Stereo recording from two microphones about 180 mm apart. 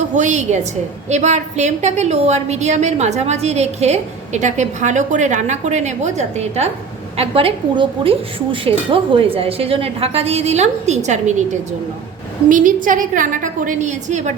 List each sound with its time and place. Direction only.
0.1 s a woman's voice: 40° right (ahead or behind)
12.5 s a woman's voice: 45° right (ahead or behind)